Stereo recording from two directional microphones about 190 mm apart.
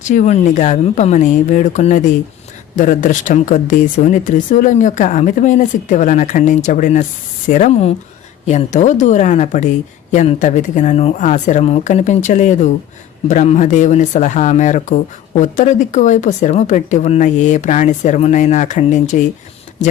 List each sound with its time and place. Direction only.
0.0 s speech: 40° left (ahead or behind)